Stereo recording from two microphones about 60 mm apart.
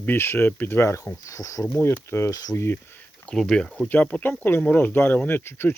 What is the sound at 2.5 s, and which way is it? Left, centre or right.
Speech, left.